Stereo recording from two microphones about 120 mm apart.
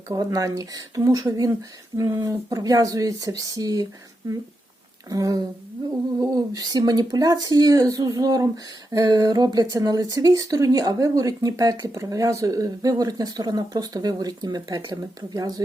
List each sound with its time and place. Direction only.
0.1 s speech: 30° right (ahead or behind)
5.0 s speech: 30° right (ahead or behind)